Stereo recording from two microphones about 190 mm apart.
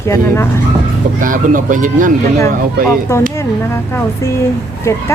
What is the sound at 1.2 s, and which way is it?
Speech, 45° right (ahead or behind).